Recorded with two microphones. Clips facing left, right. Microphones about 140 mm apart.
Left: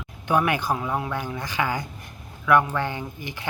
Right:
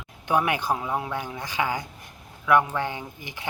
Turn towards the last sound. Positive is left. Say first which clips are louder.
# left 4 dB
turn(degrees=-15)  # may be behind; listen again after turning